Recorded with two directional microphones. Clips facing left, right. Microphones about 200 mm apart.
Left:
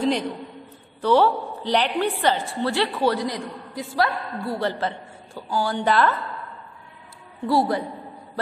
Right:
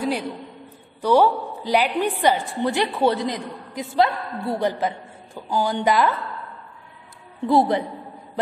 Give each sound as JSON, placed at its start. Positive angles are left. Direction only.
{"t": 1.0, "sound": "a woman's voice", "side_deg": -10}
{"t": 7.4, "sound": "a man's voice", "side_deg": -20}